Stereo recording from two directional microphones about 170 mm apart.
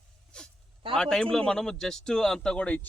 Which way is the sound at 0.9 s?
5° left (ahead or behind).